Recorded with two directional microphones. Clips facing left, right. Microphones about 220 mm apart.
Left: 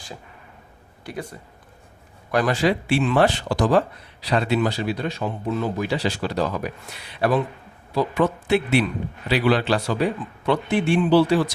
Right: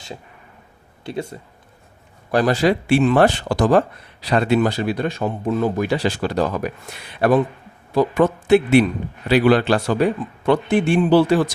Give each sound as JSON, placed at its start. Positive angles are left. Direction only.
{"t": 1.0, "sound": "speech", "side_deg": -25}